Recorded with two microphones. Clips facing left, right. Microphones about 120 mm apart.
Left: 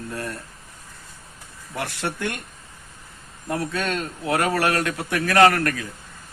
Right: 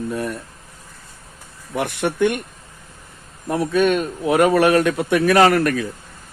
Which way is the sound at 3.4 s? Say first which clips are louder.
Right 8 dB; 25° right (ahead or behind).